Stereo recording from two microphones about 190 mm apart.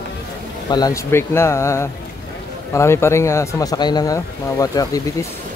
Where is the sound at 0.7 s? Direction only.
20° left (ahead or behind).